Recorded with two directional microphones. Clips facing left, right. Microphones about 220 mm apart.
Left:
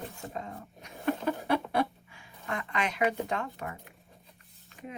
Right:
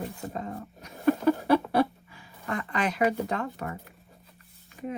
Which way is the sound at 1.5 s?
40° right (ahead or behind).